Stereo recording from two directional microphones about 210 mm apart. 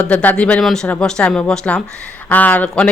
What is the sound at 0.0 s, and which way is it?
Speech, 5° left (ahead or behind).